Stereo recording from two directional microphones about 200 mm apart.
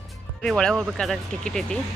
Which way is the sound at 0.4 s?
5° left (ahead or behind).